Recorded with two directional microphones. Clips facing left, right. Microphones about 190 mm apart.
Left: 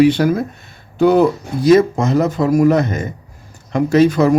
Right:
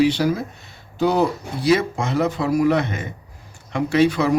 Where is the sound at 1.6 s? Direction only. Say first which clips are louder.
Left 8 dB; 45° left (ahead or behind).